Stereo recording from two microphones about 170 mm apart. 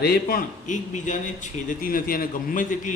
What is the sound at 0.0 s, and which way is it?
A man's voice, 65° left (ahead or behind).